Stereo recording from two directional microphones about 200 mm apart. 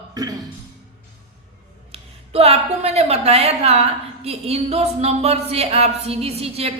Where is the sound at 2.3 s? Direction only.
30° right (ahead or behind).